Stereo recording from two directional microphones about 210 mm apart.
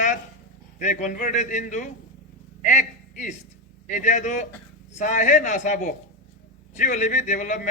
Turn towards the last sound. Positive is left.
turn(degrees=35)  # may be behind; listen again after turning